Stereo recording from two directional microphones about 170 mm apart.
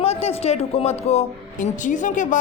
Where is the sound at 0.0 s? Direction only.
35° left (ahead or behind).